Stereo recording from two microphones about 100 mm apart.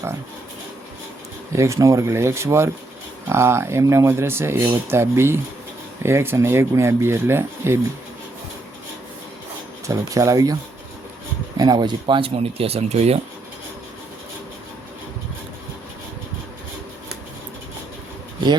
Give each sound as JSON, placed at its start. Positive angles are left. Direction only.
{"t": 1.5, "sound": "speech", "side_deg": -30}
{"t": 9.8, "sound": "speech", "side_deg": -35}